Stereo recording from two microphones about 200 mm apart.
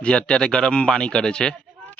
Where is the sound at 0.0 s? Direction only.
5° left (ahead or behind).